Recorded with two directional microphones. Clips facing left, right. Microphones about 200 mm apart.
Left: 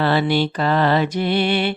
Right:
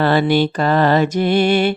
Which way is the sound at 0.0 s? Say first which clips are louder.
Right 3 dB; 50° right (ahead or behind).